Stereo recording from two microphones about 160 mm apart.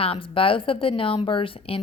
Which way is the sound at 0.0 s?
35° left (ahead or behind).